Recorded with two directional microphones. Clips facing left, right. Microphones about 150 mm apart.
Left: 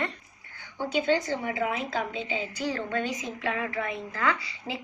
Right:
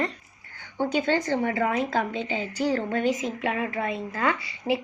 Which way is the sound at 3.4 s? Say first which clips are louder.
Right 2 dB; 25° right (ahead or behind).